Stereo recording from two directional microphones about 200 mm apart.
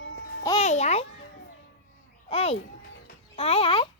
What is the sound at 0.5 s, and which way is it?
Music, 35° left (ahead or behind).